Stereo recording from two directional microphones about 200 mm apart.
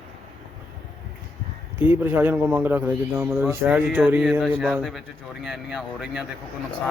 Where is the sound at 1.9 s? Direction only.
10° right (ahead or behind).